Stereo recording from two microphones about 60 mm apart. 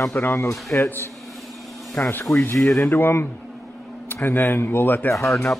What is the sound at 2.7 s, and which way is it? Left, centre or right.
Speech, left.